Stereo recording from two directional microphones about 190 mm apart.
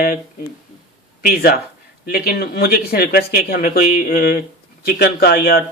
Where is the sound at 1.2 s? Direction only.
50° left (ahead or behind).